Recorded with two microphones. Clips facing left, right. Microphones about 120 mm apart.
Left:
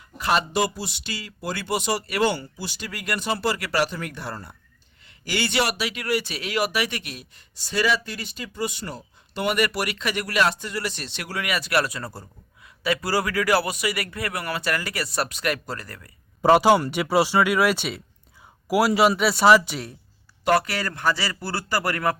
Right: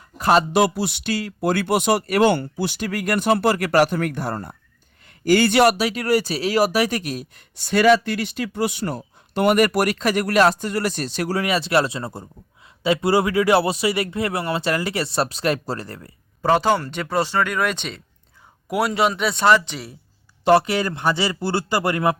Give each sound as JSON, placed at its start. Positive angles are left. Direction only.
{"t": 0.2, "sound": "a sound", "side_deg": -40}
{"t": 0.5, "sound": "speech", "side_deg": -60}
{"t": 7.5, "sound": "speech", "side_deg": -60}
{"t": 16.4, "sound": "speech", "side_deg": 10}
{"t": 20.4, "sound": "speech", "side_deg": -25}